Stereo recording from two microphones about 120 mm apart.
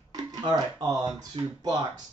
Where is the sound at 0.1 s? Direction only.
35° right (ahead or behind).